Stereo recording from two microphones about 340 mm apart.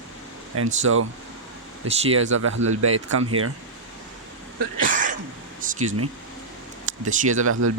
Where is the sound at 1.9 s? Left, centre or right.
Centre.